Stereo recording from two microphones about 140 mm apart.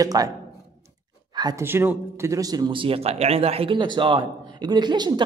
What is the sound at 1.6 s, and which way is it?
Speech, 15° right (ahead or behind).